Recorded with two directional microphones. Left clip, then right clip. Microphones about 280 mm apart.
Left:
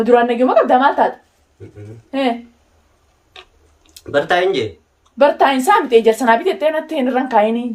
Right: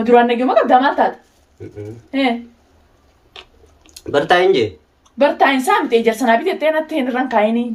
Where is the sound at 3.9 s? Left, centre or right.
Centre.